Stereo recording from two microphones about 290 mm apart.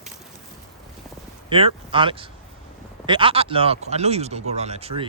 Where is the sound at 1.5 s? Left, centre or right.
Centre.